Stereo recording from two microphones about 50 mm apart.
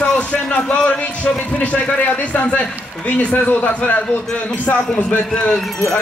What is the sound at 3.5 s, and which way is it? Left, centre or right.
Speech, left.